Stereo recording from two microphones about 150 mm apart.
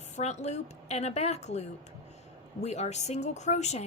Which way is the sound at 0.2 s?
50° left (ahead or behind).